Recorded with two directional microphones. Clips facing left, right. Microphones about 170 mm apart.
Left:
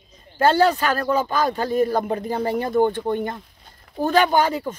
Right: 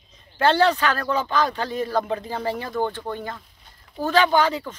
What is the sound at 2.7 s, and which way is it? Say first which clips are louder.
Speech: left 7 dB; 20° left (ahead or behind).